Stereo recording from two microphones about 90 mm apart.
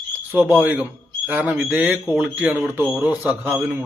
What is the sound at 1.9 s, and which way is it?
Speech, centre (ahead or behind).